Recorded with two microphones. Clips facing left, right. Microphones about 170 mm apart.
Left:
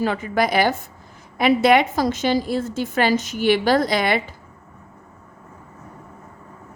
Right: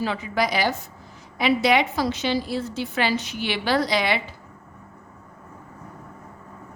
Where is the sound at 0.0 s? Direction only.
50° left (ahead or behind).